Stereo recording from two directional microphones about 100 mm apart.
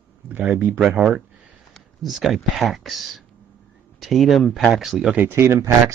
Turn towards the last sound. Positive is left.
turn(degrees=-30)  # may be behind; listen again after turning